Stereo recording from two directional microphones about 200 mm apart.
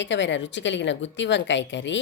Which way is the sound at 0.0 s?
65° left (ahead or behind).